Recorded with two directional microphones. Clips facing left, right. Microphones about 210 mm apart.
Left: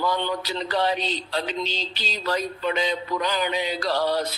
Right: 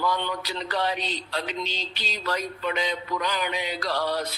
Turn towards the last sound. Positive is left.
turn(degrees=30)  # may be behind; listen again after turning